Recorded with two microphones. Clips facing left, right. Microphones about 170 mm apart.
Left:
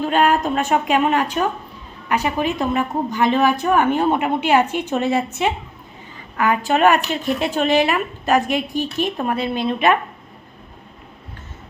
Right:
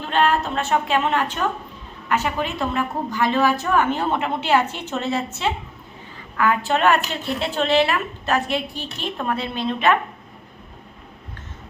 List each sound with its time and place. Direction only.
0.1 s speech: 15° left (ahead or behind)